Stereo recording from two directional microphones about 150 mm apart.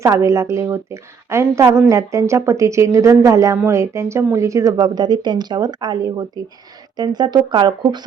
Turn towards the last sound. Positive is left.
turn(degrees=-30)  # may be behind; listen again after turning